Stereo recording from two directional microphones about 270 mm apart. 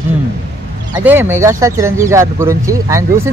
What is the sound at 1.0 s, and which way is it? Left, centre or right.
Speech, centre.